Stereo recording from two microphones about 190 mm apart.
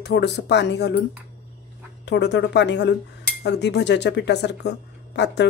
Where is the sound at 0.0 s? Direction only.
65° left (ahead or behind).